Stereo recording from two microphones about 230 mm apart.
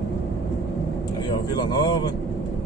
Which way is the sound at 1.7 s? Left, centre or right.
Centre.